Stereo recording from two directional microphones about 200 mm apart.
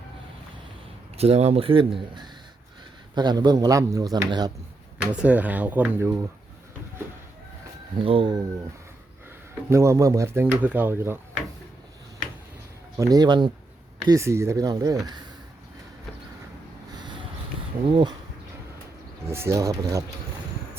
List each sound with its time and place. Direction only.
1.1 s speech: 30° right (ahead or behind)
5.1 s speech: 5° right (ahead or behind)
7.9 s speech: 25° right (ahead or behind)
9.6 s speech: 15° right (ahead or behind)
13.0 s speech: 20° right (ahead or behind)
16.9 s a sound: 20° right (ahead or behind)
17.8 s speech: 25° right (ahead or behind)
19.3 s speech: 15° right (ahead or behind)